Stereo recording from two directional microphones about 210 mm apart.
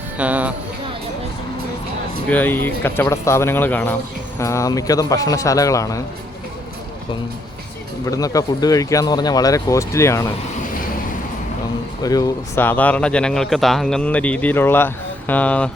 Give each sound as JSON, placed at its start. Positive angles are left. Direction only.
{"t": 0.2, "sound": "speech", "side_deg": -5}
{"t": 2.3, "sound": "speech", "side_deg": 10}
{"t": 8.0, "sound": "speech", "side_deg": 15}
{"t": 12.0, "sound": "speech", "side_deg": 15}